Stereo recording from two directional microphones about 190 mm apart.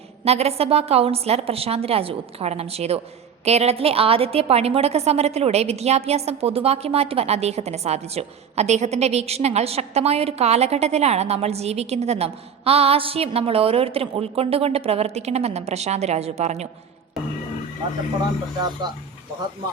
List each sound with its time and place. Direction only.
0.3 s a woman's voice: 35° right (ahead or behind)